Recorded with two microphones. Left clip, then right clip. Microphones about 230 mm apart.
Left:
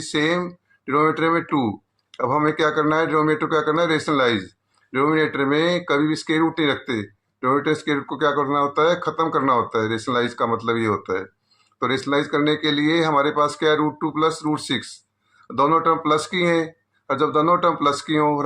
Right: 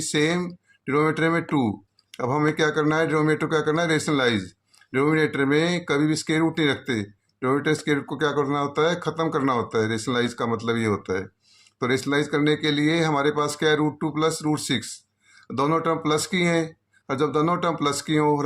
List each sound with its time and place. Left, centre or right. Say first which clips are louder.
0.0 s speech: left 2 dB; right